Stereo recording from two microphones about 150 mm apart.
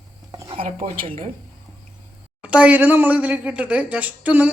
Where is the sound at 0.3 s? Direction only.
30° right (ahead or behind).